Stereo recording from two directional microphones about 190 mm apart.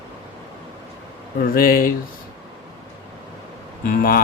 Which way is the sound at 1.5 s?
50° left (ahead or behind).